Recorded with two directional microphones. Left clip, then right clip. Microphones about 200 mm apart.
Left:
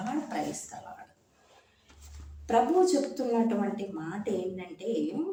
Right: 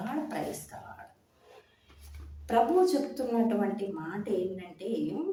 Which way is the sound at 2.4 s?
5° right (ahead or behind).